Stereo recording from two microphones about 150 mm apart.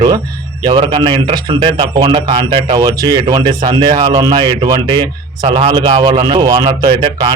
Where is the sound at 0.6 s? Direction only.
30° right (ahead or behind).